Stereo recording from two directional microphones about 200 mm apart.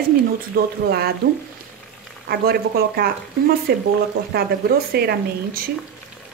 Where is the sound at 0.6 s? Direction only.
50° right (ahead or behind).